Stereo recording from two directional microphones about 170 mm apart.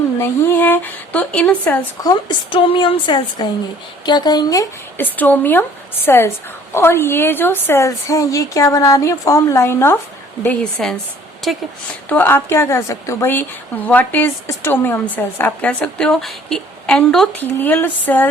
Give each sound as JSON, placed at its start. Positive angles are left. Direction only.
{"t": 0.2, "sound": "a woman's voice", "side_deg": 15}
{"t": 2.0, "sound": "a woman's voice", "side_deg": 25}
{"t": 12.0, "sound": "a woman's voice", "side_deg": 10}